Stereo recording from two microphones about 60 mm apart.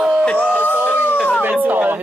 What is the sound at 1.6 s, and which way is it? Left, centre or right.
Speech, right.